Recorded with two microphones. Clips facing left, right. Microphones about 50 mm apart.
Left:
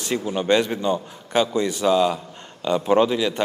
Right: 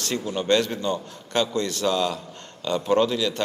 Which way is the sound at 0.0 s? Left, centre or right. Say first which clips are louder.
Left 3 dB; centre.